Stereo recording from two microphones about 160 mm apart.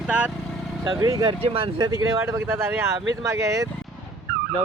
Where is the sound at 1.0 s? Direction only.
20° right (ahead or behind).